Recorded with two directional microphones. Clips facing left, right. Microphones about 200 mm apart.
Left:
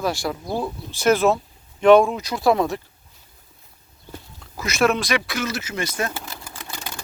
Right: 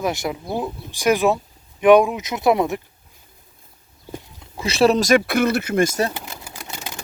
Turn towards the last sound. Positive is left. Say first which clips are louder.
# right 1 dB
turn(degrees=-20)  # may be behind; listen again after turning